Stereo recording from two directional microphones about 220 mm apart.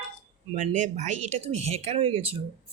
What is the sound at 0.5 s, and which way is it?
Speech, 35° right (ahead or behind).